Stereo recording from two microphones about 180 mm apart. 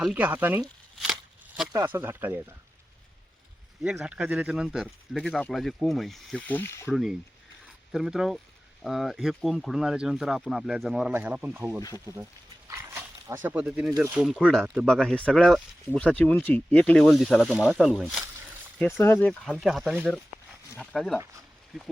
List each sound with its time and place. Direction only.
0.0 s speech: 10° right (ahead or behind)
0.9 s a sound: centre (ahead or behind)
1.6 s speech: 15° right (ahead or behind)
3.8 s speech: 5° right (ahead or behind)
6.6 s speech: 15° left (ahead or behind)
6.9 s speech: centre (ahead or behind)
11.8 s speech: 20° left (ahead or behind)
12.6 s dog: 15° right (ahead or behind)
14.1 s speech: centre (ahead or behind)
18.8 s speech: 10° left (ahead or behind)